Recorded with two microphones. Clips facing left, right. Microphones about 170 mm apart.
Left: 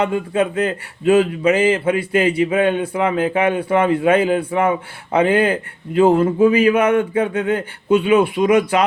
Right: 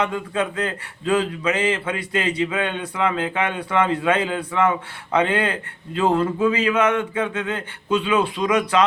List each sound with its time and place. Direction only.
0.0 s a man's voice: 30° left (ahead or behind)